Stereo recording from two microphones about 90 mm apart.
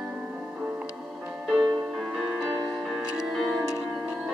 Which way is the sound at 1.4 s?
Centre (ahead or behind).